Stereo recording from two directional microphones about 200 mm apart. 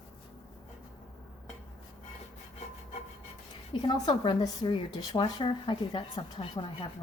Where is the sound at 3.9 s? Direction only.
20° left (ahead or behind).